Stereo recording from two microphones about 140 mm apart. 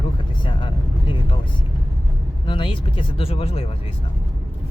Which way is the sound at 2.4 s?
35° left (ahead or behind).